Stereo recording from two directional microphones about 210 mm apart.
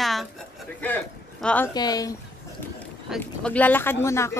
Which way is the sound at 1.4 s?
10° left (ahead or behind).